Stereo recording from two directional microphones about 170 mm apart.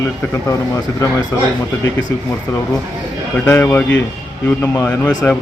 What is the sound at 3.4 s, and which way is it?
Speech, 15° left (ahead or behind).